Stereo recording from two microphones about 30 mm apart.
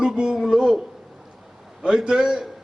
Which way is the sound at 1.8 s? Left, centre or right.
Right.